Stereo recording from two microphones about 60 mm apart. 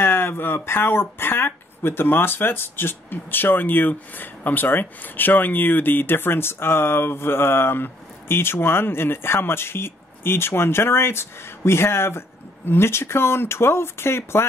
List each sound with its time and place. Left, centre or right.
0.0 s speech: left